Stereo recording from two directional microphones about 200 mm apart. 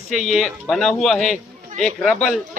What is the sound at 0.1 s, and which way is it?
Speech, centre (ahead or behind).